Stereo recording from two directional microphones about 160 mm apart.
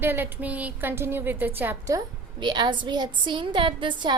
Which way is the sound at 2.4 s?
25° right (ahead or behind).